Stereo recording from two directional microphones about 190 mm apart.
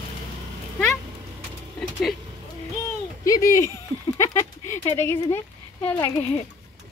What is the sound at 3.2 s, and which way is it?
Speech, 15° left (ahead or behind).